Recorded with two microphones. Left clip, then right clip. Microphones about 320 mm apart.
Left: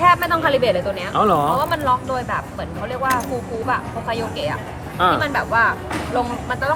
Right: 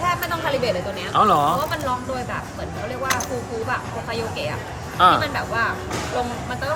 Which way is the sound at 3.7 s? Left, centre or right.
Centre.